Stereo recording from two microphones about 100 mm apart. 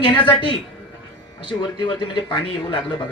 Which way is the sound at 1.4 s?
50° left (ahead or behind).